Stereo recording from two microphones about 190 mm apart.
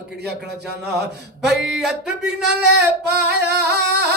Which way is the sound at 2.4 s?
60° right (ahead or behind).